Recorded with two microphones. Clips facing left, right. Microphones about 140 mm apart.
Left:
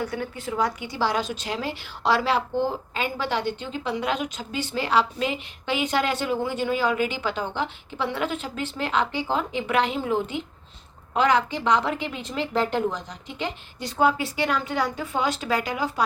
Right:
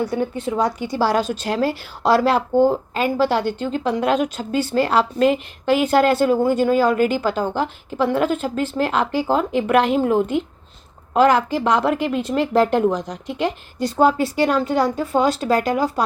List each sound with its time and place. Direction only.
0.2 s a woman's voice: 25° right (ahead or behind)
0.6 s a woman's voice: 40° right (ahead or behind)
13.7 s a woman's voice: 40° right (ahead or behind)